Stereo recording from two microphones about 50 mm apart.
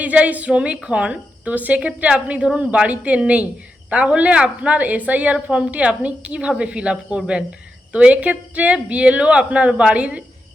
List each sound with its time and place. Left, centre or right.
0.0 s a woman's voice: right
1.5 s a woman's voice: right